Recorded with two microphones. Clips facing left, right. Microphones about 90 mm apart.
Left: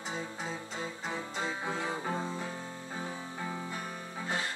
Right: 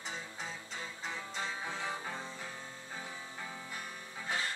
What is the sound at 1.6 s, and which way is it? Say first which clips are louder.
Music: left 5 dB; 40° left (ahead or behind).